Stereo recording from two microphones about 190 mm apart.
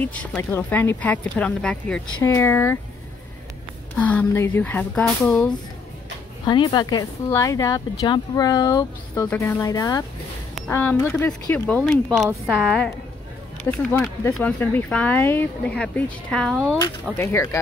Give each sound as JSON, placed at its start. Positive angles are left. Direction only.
{"t": 0.0, "sound": "speech", "side_deg": 5}
{"t": 4.0, "sound": "speech", "side_deg": 10}
{"t": 6.4, "sound": "a woman's voice", "side_deg": 25}
{"t": 17.2, "sound": "speech", "side_deg": 15}